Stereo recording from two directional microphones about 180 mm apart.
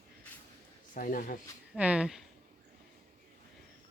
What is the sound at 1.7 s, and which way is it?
Speech, 5° right (ahead or behind).